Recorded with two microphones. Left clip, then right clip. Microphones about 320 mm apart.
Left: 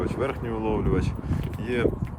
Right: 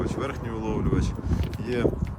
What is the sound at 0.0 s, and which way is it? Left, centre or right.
Speech, centre.